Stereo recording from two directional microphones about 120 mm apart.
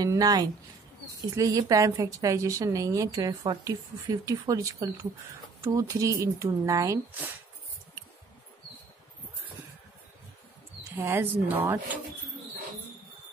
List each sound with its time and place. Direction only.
0.0 s a woman's voice: 30° right (ahead or behind)
11.0 s speech: 20° right (ahead or behind)